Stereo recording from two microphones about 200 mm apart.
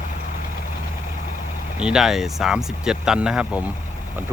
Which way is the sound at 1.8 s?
5° right (ahead or behind).